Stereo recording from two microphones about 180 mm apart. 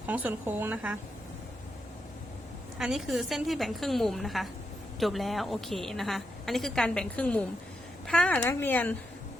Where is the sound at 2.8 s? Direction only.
Centre (ahead or behind).